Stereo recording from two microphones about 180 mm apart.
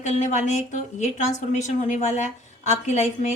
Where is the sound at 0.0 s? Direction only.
40° left (ahead or behind).